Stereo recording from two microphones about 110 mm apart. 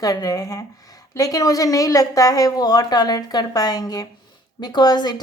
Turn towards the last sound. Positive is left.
turn(degrees=40)  # may be behind; listen again after turning